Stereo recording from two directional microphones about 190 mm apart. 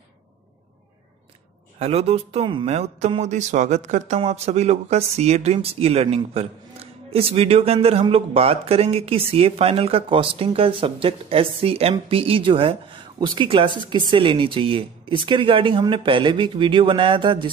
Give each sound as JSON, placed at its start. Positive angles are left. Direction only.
{"t": 1.8, "sound": "speech", "side_deg": -30}